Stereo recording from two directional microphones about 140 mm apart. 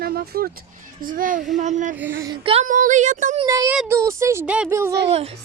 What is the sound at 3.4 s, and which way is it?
Speech, 25° right (ahead or behind).